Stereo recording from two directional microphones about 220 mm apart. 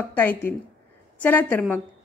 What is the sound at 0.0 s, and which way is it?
A woman's voice, 10° left (ahead or behind).